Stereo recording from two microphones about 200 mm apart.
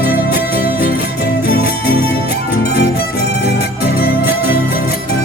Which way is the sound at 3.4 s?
50° left (ahead or behind).